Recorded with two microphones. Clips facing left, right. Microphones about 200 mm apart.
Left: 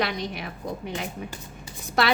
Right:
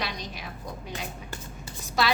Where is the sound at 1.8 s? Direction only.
60° left (ahead or behind).